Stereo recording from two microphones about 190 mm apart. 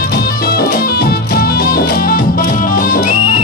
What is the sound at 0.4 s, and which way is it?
Music, 55° left (ahead or behind).